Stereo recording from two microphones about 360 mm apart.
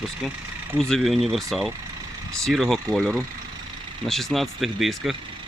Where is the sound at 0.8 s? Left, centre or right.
Centre.